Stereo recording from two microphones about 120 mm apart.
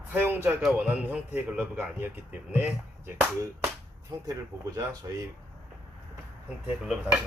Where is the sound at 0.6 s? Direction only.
5° right (ahead or behind).